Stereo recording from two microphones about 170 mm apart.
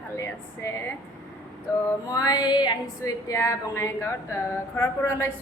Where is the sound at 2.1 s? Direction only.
20° left (ahead or behind).